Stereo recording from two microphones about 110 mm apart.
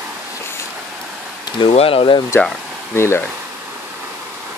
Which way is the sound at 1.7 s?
60° left (ahead or behind).